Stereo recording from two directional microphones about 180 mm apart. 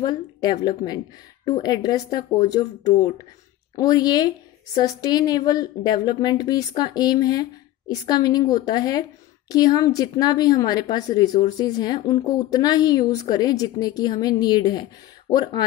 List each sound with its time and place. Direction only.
0.0 s a woman's voice: 20° left (ahead or behind)